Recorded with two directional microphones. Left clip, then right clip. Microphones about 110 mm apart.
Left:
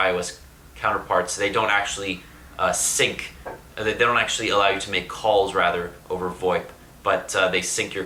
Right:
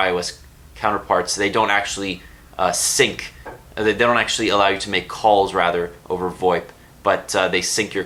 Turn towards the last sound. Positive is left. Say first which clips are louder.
# right 4 dB
turn(degrees=-35)  # may be behind; listen again after turning